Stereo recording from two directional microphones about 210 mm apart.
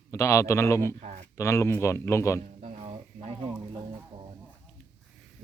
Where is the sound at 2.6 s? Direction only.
35° right (ahead or behind).